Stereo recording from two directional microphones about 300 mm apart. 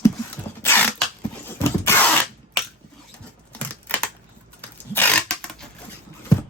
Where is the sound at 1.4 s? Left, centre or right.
Centre.